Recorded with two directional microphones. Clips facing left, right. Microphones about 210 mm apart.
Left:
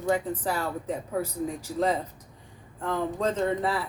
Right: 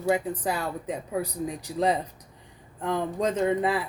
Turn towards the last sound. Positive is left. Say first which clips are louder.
# right 2 dB
turn(degrees=-15)  # may be behind; listen again after turning